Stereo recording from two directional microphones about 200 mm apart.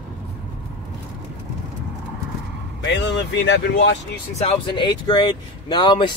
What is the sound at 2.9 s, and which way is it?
Speech, 60° left (ahead or behind).